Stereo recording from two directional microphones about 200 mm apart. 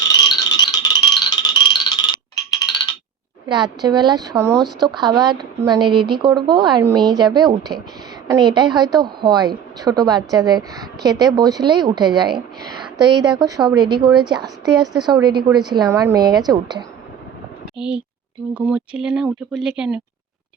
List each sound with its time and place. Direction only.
0.1 s a sound: 20° left (ahead or behind)
3.8 s a woman's voice: 20° right (ahead or behind)
4.5 s speech: centre (ahead or behind)
4.9 s a woman's voice: 20° right (ahead or behind)
15.4 s speech: centre (ahead or behind)
15.7 s a woman's voice: 20° right (ahead or behind)
17.7 s speech: 5° right (ahead or behind)